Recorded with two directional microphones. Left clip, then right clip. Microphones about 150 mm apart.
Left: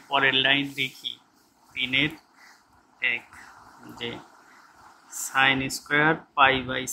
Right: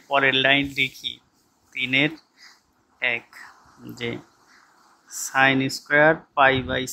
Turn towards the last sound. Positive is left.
turn(degrees=-40)  # may be behind; listen again after turning